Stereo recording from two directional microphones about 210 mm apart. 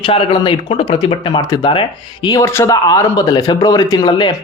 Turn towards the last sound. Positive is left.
turn(degrees=20)  # may be behind; listen again after turning